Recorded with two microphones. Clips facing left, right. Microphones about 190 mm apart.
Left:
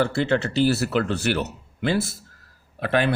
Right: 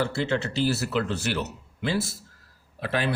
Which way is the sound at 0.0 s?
60° left (ahead or behind).